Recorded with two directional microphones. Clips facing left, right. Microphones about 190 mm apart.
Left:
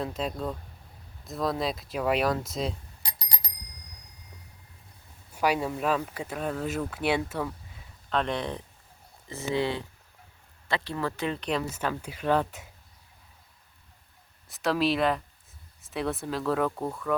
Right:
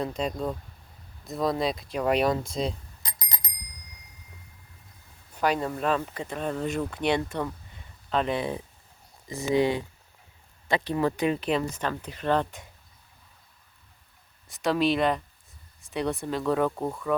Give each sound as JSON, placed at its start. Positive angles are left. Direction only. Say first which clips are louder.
{"t": 0.0, "sound": "speech", "louder": "right 2 dB", "side_deg": 0}
{"t": 5.3, "sound": "speech", "louder": "even", "side_deg": 10}
{"t": 14.5, "sound": "speech", "louder": "right 2 dB", "side_deg": 0}